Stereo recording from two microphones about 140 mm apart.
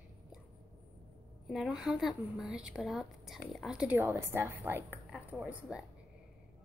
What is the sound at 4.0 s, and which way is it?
A woman's voice, 15° right (ahead or behind).